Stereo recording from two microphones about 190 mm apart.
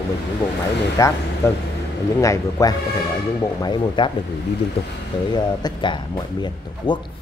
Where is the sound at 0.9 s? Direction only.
15° left (ahead or behind).